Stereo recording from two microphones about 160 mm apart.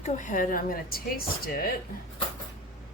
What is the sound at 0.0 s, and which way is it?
Speech, 50° left (ahead or behind).